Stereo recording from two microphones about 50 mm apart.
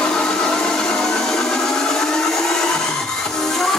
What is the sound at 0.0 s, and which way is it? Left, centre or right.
Blender, centre.